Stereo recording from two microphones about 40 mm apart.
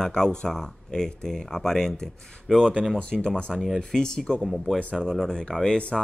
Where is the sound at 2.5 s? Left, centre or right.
Centre.